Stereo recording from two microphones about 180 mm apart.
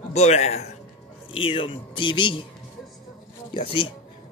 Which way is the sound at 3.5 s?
30° left (ahead or behind).